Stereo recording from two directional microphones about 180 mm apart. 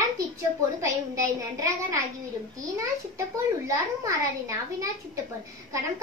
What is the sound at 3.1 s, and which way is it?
A woman's voice, 15° right (ahead or behind).